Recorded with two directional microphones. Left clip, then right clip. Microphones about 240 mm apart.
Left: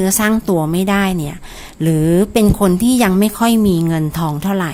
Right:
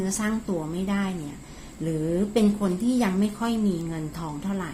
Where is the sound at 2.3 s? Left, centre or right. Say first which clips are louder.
Left 10 dB; left.